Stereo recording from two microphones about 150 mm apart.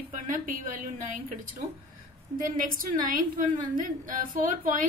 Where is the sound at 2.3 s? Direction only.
65° right (ahead or behind).